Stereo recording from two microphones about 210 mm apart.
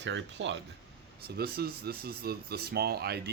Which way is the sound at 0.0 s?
60° right (ahead or behind).